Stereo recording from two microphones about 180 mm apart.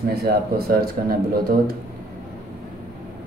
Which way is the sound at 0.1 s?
60° right (ahead or behind).